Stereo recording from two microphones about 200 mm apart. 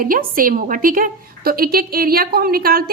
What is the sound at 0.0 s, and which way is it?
A woman's voice, 45° right (ahead or behind).